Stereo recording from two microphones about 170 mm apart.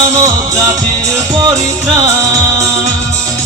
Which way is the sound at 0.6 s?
20° right (ahead or behind).